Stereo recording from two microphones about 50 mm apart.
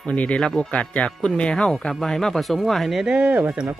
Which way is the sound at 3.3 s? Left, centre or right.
Right.